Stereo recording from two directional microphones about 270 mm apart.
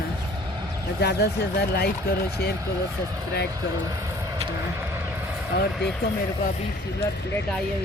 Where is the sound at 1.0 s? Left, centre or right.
Left.